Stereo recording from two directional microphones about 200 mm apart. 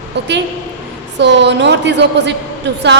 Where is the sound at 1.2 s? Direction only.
60° right (ahead or behind).